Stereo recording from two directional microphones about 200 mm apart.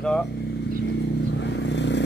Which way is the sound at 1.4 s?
60° left (ahead or behind).